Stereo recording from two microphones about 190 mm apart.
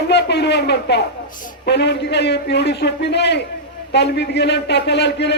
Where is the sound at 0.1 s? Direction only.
65° left (ahead or behind).